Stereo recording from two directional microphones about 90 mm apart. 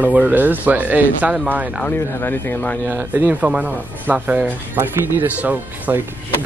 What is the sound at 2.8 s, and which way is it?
Speech, 20° right (ahead or behind).